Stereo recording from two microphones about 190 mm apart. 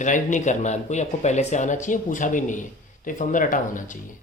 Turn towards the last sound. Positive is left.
turn(degrees=45)  # may be behind; listen again after turning